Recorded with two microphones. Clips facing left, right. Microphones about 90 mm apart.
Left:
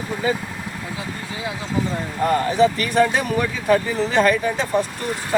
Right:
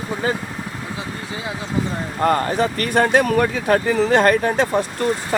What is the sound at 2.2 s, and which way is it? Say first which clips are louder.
Speech: left 1 dB; 50° right (ahead or behind).